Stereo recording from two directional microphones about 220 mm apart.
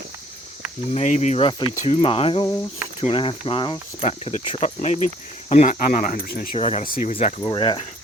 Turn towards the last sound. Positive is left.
turn(degrees=20)  # may be behind; listen again after turning